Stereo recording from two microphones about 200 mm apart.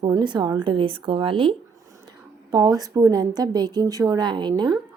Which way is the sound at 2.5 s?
20° right (ahead or behind).